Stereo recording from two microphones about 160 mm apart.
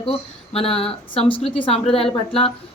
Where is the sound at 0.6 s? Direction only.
35° left (ahead or behind).